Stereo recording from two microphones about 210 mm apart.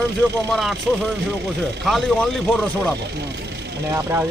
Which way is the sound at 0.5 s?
Centre (ahead or behind).